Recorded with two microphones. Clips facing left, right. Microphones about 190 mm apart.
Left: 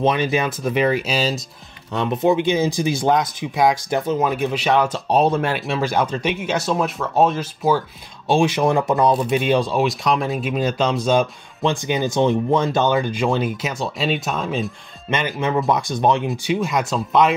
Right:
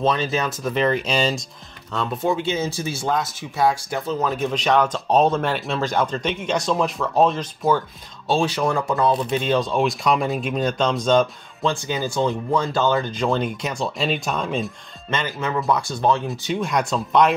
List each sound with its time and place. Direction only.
0.0 s speech: 15° left (ahead or behind)
0.6 s speech: 5° left (ahead or behind)
1.9 s speech: 20° left (ahead or behind)
8.3 s speech: 15° left (ahead or behind)
11.6 s speech: 20° left (ahead or behind); by 14.7 s centre (ahead or behind)
15.0 s speech: 15° left (ahead or behind)
16.4 s speech: centre (ahead or behind)